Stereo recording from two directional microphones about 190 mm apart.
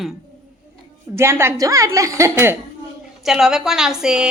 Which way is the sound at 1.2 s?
15° right (ahead or behind).